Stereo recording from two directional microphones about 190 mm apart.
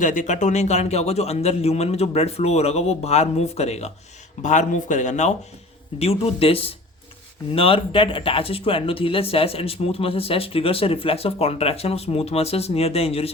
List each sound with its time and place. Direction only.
0.0 s speech: 40° left (ahead or behind)